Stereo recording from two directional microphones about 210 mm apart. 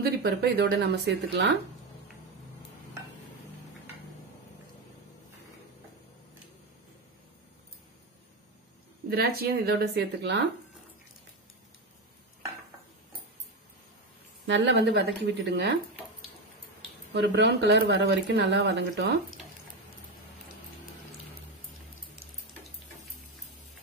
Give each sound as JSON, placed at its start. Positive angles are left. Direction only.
{"t": 0.0, "sound": "speech", "side_deg": -50}
{"t": 9.1, "sound": "speech", "side_deg": -45}
{"t": 14.4, "sound": "speech", "side_deg": -55}
{"t": 17.1, "sound": "speech", "side_deg": -60}